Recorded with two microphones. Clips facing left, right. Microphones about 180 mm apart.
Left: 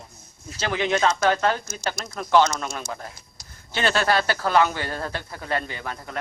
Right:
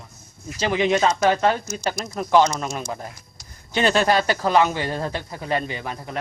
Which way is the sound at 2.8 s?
20° right (ahead or behind).